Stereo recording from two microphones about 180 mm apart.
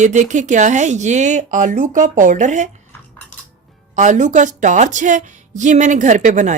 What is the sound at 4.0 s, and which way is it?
A woman's voice, 45° right (ahead or behind).